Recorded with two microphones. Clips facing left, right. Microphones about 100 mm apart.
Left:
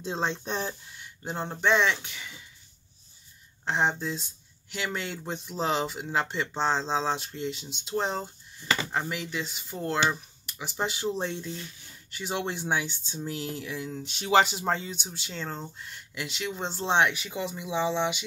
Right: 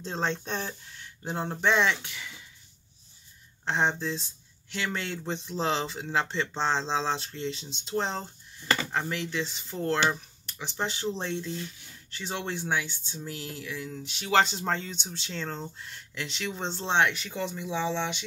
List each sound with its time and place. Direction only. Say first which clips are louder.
0.0 s speech: left 1 dB; 10° left (ahead or behind)
1.0 s speech: right 1 dB; centre (ahead or behind)
3.6 s speech: even; 5° left (ahead or behind); by 13.9 s 20° left (ahead or behind)
13.9 s speech: left 3 dB; 30° left (ahead or behind)
14.3 s speech: left 2 dB; 10° left (ahead or behind)